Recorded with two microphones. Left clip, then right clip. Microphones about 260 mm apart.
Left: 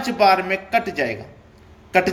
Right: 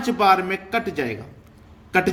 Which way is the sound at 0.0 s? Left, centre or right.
Centre.